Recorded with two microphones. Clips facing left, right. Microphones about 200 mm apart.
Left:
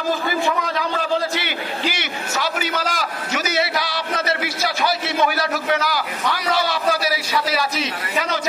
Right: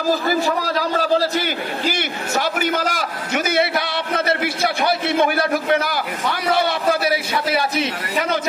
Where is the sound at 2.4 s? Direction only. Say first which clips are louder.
Right 4 dB; 50° right (ahead or behind).